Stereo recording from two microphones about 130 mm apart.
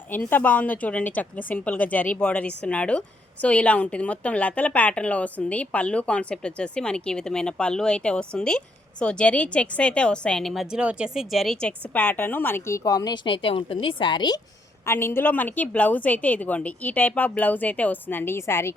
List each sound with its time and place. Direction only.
0.3 s a woman's voice: 15° left (ahead or behind)
13.2 s a woman's voice: 45° left (ahead or behind)
14.8 s a woman's voice: 20° left (ahead or behind)